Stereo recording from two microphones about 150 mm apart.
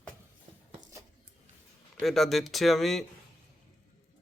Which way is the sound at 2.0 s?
Centre (ahead or behind).